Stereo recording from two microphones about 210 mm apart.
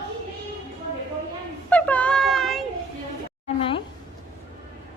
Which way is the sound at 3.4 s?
25° left (ahead or behind).